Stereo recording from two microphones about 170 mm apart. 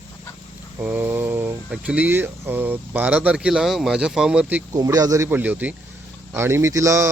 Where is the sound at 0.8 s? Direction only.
10° right (ahead or behind).